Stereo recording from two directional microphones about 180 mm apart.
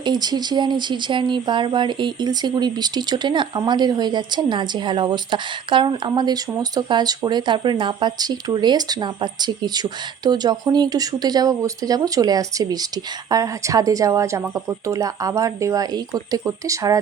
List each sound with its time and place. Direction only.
0.0 s speech: 25° right (ahead or behind)